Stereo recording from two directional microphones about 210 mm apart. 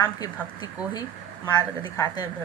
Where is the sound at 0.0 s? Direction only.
15° left (ahead or behind).